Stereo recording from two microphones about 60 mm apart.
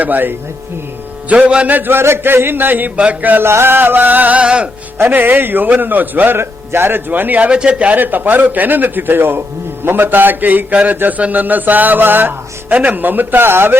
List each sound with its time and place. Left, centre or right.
0.0 s a man's voice: right
1.3 s a man's voice: centre
1.6 s a man's voice: right
3.4 s a man's voice: right; by 4.7 s centre
4.9 s a man's voice: right
7.5 s a man's voice: centre; by 13.7 s right